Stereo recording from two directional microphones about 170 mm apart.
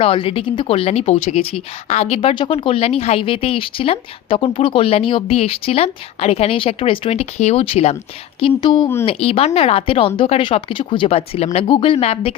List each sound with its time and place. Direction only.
0.0 s speech: 35° left (ahead or behind)